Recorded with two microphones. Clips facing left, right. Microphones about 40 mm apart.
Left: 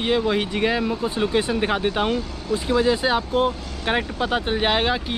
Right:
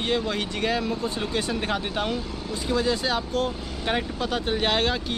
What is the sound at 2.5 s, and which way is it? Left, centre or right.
Speech, centre.